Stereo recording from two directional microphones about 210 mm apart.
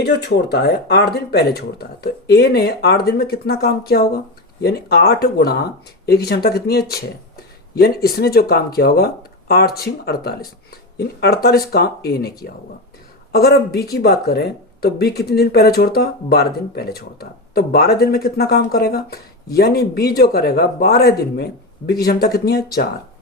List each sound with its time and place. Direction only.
0.0 s speech: 55° left (ahead or behind)